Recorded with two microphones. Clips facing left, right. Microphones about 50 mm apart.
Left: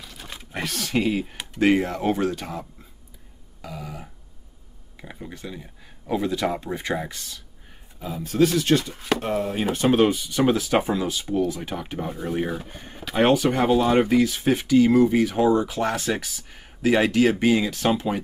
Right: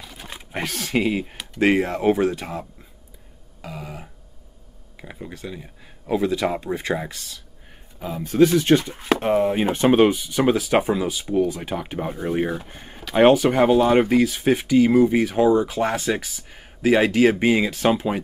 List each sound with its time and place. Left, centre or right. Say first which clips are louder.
0.0 s a sound: right 2 dB; centre
1.6 s speech: right 1 dB; centre
3.6 s a sound: right 1 dB; right
4.9 s speech: right 2 dB; centre
6.6 s speech: right 2 dB; centre
8.0 s speech: right 4 dB; centre